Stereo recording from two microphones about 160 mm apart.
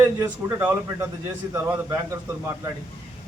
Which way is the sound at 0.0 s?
15° right (ahead or behind).